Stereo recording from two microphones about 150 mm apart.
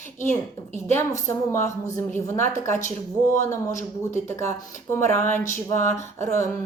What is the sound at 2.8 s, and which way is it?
Speech, 55° left (ahead or behind).